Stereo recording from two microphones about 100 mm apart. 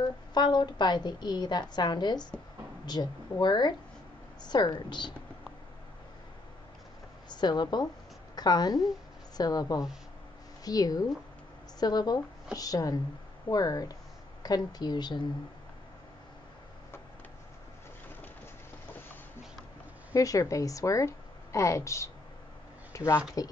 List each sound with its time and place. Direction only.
0.3 s a woman's voice: 45° left (ahead or behind)
7.2 s a woman's voice: 50° left (ahead or behind)
20.2 s speech: 35° left (ahead or behind)